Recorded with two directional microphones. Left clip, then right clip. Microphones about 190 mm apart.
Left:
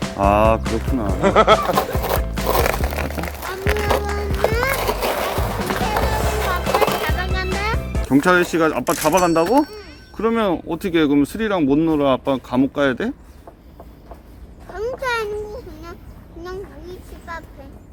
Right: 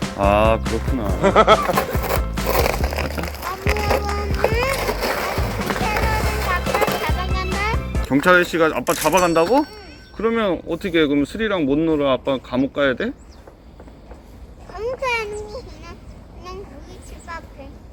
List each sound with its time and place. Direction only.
0.0 s music: centre (ahead or behind)
0.3 s speech: 40° left (ahead or behind)
0.6 s speech: centre (ahead or behind)
2.1 s music: centre (ahead or behind)
4.8 s skateboard: centre (ahead or behind)
8.0 s speech: 45° left (ahead or behind)
8.8 s speech: centre (ahead or behind)
9.2 s speech: 40° left (ahead or behind)